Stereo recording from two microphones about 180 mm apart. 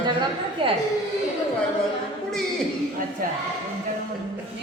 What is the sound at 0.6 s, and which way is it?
Speech, 30° right (ahead or behind).